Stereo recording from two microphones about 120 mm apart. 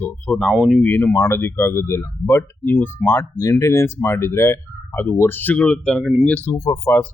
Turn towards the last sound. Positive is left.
turn(degrees=20)  # may be behind; listen again after turning